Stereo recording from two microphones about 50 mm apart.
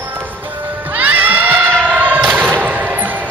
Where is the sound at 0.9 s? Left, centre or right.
Right.